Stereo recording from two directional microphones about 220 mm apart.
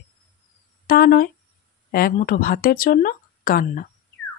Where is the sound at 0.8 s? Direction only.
45° left (ahead or behind).